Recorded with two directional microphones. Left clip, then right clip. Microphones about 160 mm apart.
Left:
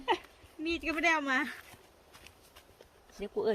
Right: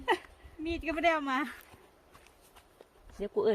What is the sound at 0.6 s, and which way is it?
Speech, 90° right.